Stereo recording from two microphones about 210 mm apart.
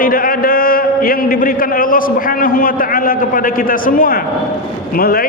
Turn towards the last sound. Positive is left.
turn(degrees=45)  # may be behind; listen again after turning